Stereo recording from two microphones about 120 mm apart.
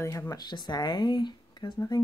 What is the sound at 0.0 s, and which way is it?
Speech, 25° left (ahead or behind).